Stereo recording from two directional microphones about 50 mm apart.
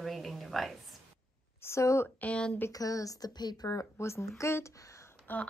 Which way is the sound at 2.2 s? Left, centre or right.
Left.